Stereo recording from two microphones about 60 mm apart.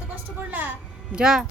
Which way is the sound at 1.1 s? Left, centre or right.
Centre.